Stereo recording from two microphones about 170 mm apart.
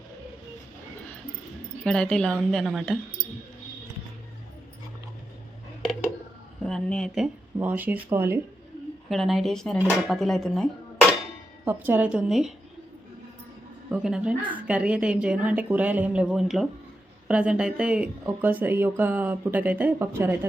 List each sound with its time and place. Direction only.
1.8 s speech: 5° left (ahead or behind)
6.6 s speech: centre (ahead or behind)
7.6 s speech: 10° right (ahead or behind)
9.0 s speech: centre (ahead or behind)
11.6 s speech: 10° right (ahead or behind)
13.9 s speech: 5° right (ahead or behind)